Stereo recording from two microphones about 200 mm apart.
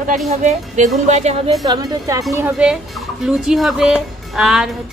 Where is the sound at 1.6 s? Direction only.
20° right (ahead or behind).